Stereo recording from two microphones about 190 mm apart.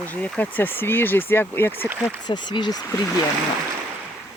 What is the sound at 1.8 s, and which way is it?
Speech, 10° right (ahead or behind).